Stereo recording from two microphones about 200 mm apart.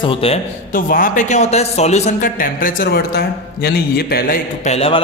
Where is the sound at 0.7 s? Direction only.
40° left (ahead or behind).